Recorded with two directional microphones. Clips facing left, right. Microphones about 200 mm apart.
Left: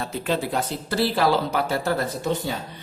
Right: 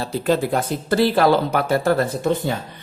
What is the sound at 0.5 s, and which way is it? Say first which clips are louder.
Speech: right 5 dB; 55° right (ahead or behind).